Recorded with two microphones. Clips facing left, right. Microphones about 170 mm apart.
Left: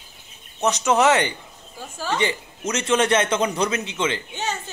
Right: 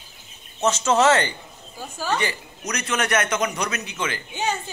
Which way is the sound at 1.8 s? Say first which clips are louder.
Right 1 dB; centre (ahead or behind).